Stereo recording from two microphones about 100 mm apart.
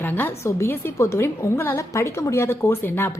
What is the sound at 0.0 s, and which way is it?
Speech, 20° left (ahead or behind).